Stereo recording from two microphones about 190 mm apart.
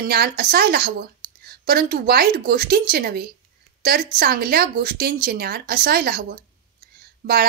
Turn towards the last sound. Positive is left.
turn(degrees=-55)  # may be behind; listen again after turning